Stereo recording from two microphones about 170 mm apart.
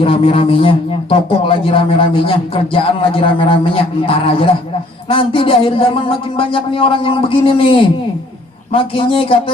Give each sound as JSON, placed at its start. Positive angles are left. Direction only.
{"t": 0.0, "sound": "a man's voice", "side_deg": 30}